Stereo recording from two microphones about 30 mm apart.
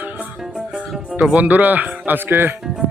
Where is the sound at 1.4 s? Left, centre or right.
Right.